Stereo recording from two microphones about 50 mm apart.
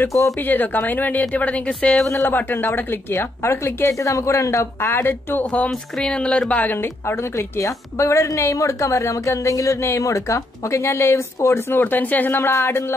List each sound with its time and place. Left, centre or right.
0.4 s speech: left
1.3 s a woman's voice: left
2.2 s a woman's voice: left
4.7 s speech: left
5.4 s a woman's voice: left
6.5 s speech: left
6.8 s a woman's voice: left
11.7 s speech: left
12.4 s a woman's voice: left